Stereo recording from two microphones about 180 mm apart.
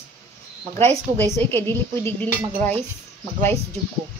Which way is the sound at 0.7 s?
10° left (ahead or behind).